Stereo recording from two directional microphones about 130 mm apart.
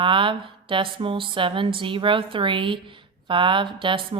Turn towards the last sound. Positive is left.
turn(degrees=-40)  # may be behind; listen again after turning